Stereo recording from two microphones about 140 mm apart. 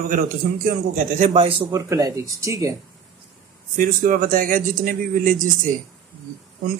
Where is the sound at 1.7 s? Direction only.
25° right (ahead or behind).